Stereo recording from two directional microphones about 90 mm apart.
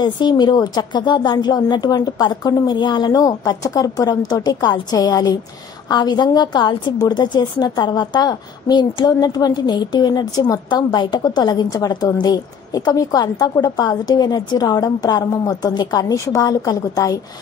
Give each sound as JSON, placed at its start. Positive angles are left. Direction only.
{"t": 0.0, "sound": "a woman's voice", "side_deg": 50}